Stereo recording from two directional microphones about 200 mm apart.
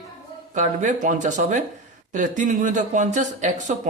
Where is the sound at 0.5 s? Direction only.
40° right (ahead or behind).